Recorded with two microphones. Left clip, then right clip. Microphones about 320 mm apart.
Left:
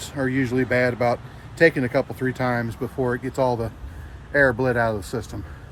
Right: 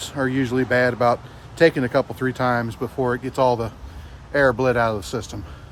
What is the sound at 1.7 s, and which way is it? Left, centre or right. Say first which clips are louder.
Speech: right 1 dB; centre.